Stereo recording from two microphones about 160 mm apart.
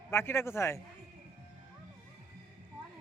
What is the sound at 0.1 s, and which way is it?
Speech, 15° left (ahead or behind).